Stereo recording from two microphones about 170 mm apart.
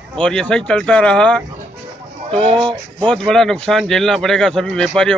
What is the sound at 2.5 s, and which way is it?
Speech, 30° right (ahead or behind).